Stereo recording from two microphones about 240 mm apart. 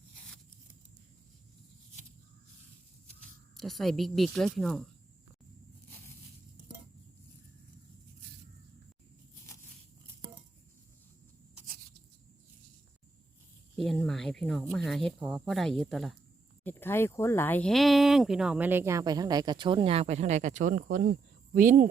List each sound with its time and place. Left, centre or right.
3.6 s speech: centre
13.7 s a sound: centre
14.7 s speech: centre; by 21.8 s right